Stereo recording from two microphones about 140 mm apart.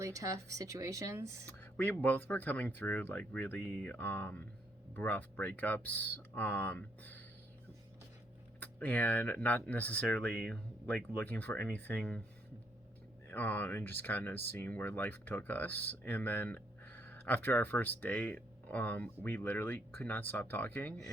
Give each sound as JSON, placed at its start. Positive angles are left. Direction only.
{"t": 0.0, "sound": "speech", "side_deg": -20}
{"t": 1.7, "sound": "speech", "side_deg": 15}
{"t": 8.6, "sound": "speech", "side_deg": 10}
{"t": 13.2, "sound": "speech", "side_deg": 10}